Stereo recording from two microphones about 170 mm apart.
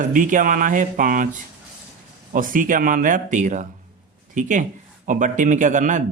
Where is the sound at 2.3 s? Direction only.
50° right (ahead or behind).